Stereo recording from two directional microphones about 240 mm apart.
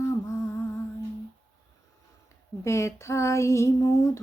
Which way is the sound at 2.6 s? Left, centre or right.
Centre.